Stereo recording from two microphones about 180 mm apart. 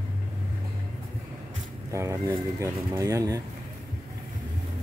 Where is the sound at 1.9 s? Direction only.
15° right (ahead or behind).